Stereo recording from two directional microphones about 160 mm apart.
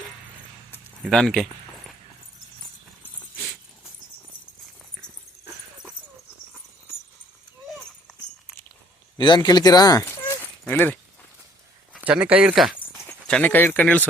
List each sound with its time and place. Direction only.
1.1 s speech: 5° left (ahead or behind)
9.1 s speech: 30° left (ahead or behind); by 10.9 s 15° left (ahead or behind)
11.9 s speech: 10° right (ahead or behind)
13.1 s speech: 10° left (ahead or behind)